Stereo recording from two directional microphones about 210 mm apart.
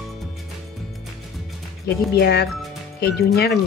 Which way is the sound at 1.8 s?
50° left (ahead or behind).